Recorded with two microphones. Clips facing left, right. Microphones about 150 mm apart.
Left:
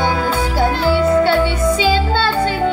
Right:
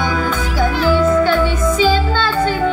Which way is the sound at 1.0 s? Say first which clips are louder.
Left 3 dB; 35° left (ahead or behind).